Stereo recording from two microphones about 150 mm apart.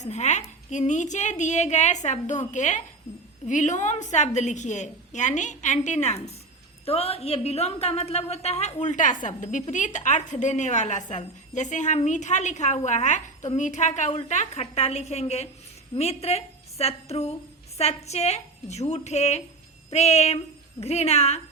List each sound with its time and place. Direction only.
0.0 s a woman's voice: 50° left (ahead or behind)